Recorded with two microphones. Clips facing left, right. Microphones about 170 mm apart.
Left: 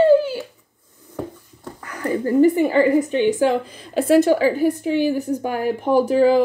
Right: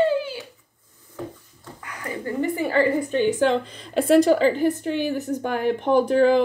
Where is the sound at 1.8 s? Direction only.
40° left (ahead or behind).